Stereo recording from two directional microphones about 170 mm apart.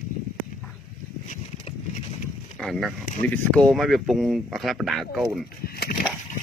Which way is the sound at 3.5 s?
5° left (ahead or behind).